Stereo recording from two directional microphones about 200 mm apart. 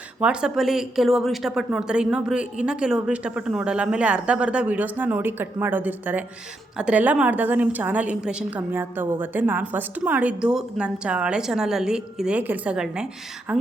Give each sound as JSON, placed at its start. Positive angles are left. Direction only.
{"t": 0.2, "sound": "a woman's voice", "side_deg": -5}